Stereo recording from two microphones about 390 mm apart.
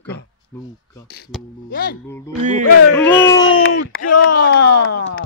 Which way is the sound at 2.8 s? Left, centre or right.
Left.